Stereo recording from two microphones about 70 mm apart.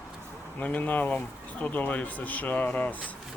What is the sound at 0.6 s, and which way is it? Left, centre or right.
Speech, left.